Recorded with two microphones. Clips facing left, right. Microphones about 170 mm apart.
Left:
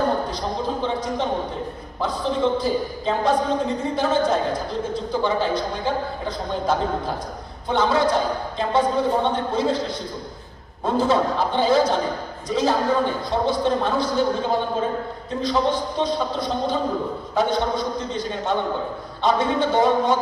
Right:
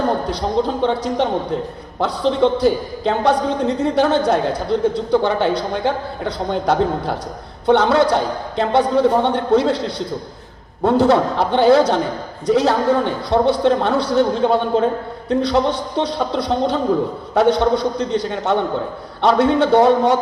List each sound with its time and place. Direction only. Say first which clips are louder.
0.8 s a woman's voice: right 6 dB; 70° right (ahead or behind)